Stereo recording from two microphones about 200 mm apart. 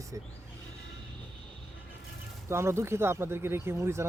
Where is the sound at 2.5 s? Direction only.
15° right (ahead or behind).